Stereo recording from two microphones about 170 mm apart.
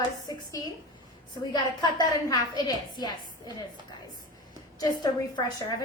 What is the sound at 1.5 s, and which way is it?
A woman's voice, 25° left (ahead or behind).